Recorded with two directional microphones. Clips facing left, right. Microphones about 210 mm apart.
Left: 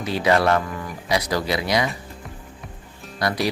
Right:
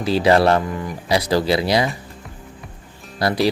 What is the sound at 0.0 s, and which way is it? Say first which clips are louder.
A man's voice: right 4 dB; 30° right (ahead or behind).